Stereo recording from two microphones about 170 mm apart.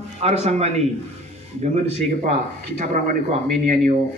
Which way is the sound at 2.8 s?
45° right (ahead or behind).